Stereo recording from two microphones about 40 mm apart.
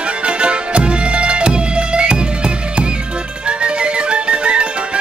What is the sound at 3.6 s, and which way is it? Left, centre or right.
Music, right.